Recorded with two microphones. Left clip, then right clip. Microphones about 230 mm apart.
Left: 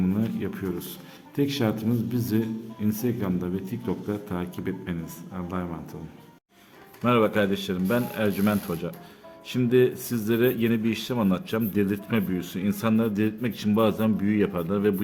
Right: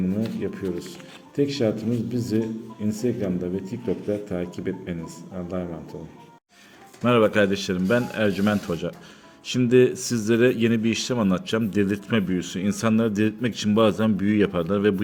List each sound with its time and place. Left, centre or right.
0.3 s speech: centre
7.0 s speech: right